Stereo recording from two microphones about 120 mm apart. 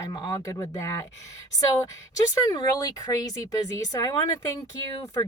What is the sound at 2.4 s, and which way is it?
Speech, 35° left (ahead or behind).